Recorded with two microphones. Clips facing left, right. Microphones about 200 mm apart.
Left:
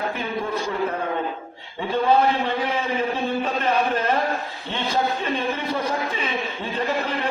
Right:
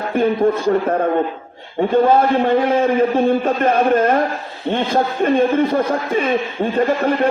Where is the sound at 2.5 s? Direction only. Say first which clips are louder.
Right 10 dB; 50° right (ahead or behind).